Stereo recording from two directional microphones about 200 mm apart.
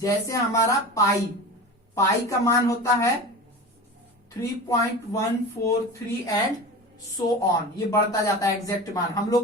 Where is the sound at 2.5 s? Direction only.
15° left (ahead or behind).